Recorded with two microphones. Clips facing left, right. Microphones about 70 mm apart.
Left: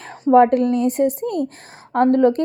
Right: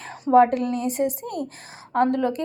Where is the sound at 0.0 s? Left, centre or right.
Left.